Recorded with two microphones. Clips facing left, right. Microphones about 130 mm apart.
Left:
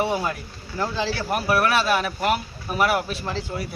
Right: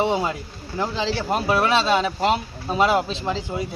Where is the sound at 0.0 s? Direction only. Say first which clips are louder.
Right 2 dB; 20° right (ahead or behind).